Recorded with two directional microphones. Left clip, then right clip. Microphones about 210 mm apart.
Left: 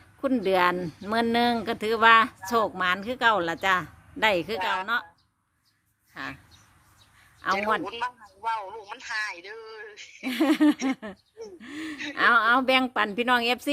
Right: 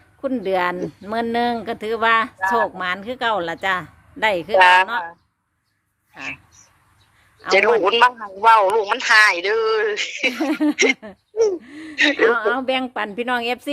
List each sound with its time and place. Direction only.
0.2 s speech: centre (ahead or behind)
4.5 s speech: 50° right (ahead or behind)
6.1 s speech: centre (ahead or behind)
7.4 s a man's voice: centre (ahead or behind)
7.8 s speech: 50° right (ahead or behind)
10.3 s a woman's voice: 5° left (ahead or behind)